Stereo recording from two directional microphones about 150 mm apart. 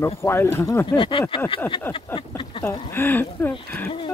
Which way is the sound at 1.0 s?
35° left (ahead or behind).